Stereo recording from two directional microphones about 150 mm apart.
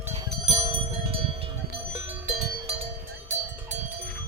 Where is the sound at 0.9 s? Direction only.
35° right (ahead or behind).